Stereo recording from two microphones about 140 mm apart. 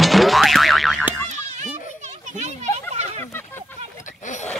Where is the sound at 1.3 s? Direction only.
55° right (ahead or behind).